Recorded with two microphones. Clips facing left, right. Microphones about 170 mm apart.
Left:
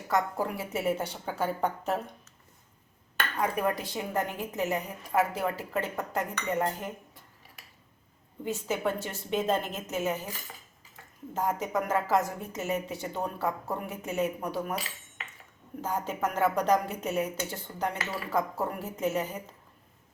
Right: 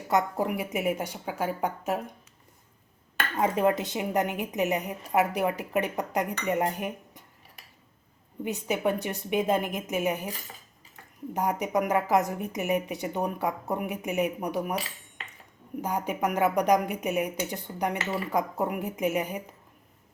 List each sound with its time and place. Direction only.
0.1 s a woman's voice: 20° right (ahead or behind)
3.3 s a woman's voice: 25° right (ahead or behind)
8.4 s a woman's voice: 15° right (ahead or behind)
11.3 s a woman's voice: 15° right (ahead or behind)
15.8 s a woman's voice: 15° right (ahead or behind)